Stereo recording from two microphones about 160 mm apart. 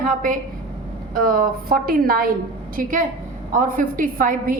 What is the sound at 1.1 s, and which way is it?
A woman's voice, 65° right (ahead or behind).